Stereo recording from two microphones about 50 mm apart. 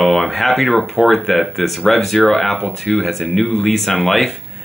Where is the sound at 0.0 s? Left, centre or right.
Centre.